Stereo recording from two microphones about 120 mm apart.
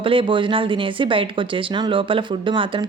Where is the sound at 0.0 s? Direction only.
45° right (ahead or behind).